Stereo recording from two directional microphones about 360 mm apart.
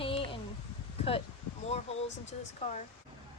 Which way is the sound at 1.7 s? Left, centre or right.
Centre.